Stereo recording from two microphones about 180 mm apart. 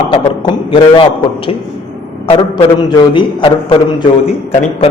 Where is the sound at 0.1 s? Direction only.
30° left (ahead or behind).